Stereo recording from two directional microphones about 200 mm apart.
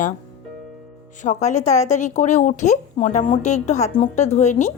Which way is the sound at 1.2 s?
35° left (ahead or behind).